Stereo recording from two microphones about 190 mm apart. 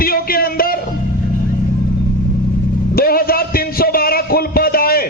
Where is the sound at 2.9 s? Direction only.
50° left (ahead or behind).